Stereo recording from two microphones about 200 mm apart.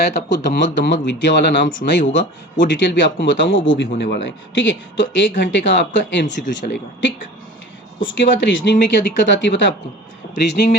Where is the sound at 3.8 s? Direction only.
55° left (ahead or behind).